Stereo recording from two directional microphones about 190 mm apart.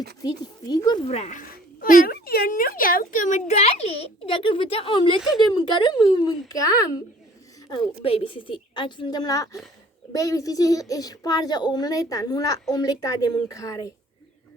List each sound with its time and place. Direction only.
0.2 s a child's voice: 20° left (ahead or behind)
7.7 s speech: 30° left (ahead or behind)